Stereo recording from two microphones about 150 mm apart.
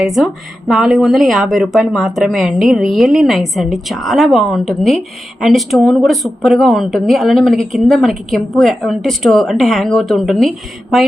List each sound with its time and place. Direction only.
0.0 s speech: centre (ahead or behind)